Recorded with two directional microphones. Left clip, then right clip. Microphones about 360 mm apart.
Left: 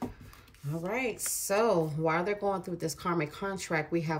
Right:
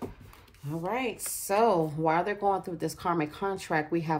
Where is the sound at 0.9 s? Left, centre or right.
Centre.